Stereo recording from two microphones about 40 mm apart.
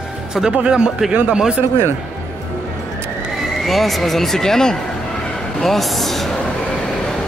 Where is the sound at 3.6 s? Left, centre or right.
Centre.